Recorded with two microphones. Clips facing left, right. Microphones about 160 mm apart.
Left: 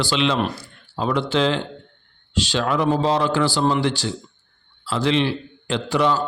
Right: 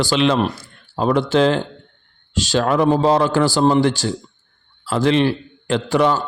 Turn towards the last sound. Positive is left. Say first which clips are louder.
# right 3 dB
turn(degrees=-50)  # may be behind; listen again after turning